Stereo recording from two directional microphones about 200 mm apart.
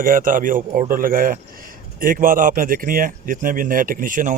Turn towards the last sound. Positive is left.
turn(degrees=-40)  # may be behind; listen again after turning